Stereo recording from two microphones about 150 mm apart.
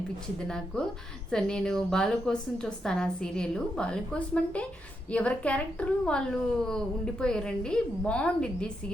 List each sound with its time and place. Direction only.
0.3 s a woman's voice: 5° left (ahead or behind)